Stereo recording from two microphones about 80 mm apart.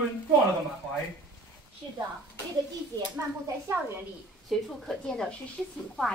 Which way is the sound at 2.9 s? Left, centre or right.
Left.